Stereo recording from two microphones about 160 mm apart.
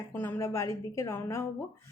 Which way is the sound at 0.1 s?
15° left (ahead or behind).